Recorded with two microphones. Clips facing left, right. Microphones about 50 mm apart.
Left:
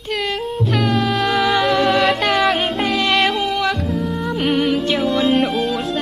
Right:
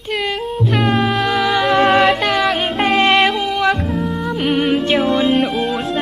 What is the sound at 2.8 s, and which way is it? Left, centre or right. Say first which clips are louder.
Music: right 9 dB; right.